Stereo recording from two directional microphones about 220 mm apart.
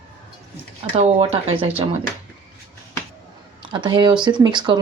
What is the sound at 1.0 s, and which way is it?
Speech, 25° right (ahead or behind).